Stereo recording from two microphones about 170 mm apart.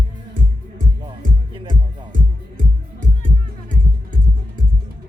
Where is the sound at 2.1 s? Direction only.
50° right (ahead or behind).